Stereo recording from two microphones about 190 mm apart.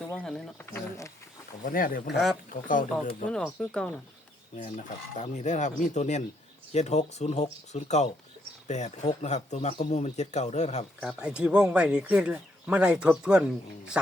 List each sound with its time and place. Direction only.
0.0 s a sound: 5° left (ahead or behind)
1.6 s speech: 45° left (ahead or behind)
2.1 s speech: centre (ahead or behind)
2.5 s speech: 45° left (ahead or behind)
3.2 s speech: 5° left (ahead or behind)
4.5 s speech: 40° left (ahead or behind)
11.0 s speech: 5° right (ahead or behind)